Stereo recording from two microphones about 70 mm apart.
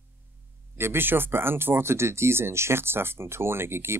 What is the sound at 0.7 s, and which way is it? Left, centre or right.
Speech, right.